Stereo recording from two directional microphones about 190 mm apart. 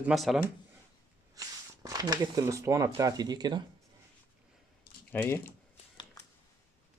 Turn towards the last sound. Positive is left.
turn(degrees=10)  # may be behind; listen again after turning